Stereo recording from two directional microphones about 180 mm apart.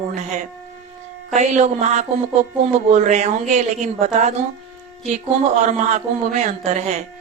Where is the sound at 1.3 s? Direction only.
40° right (ahead or behind).